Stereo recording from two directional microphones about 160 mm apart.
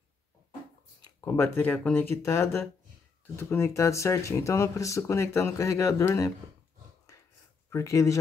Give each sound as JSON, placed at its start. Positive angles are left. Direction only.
{"t": 1.2, "sound": "speech", "side_deg": 15}
{"t": 7.1, "sound": "a sound", "side_deg": 20}
{"t": 7.7, "sound": "speech", "side_deg": 20}